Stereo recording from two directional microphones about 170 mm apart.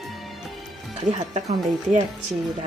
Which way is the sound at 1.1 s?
40° right (ahead or behind).